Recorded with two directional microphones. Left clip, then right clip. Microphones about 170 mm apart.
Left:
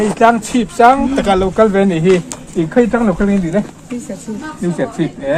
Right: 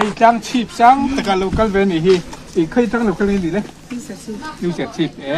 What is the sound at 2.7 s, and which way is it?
Speech, 25° left (ahead or behind).